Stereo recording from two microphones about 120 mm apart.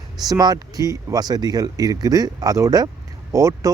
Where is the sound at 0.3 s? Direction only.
35° right (ahead or behind).